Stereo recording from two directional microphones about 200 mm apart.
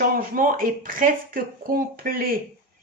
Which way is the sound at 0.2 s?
45° right (ahead or behind).